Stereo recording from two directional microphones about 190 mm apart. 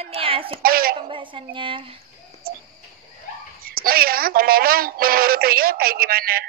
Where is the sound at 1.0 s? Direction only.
25° right (ahead or behind).